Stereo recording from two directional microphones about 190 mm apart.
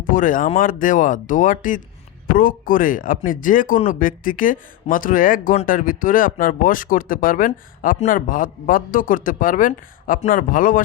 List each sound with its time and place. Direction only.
0.1 s speech: 45° left (ahead or behind)